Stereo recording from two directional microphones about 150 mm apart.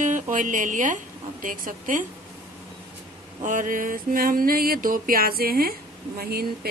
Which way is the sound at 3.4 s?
60° right (ahead or behind).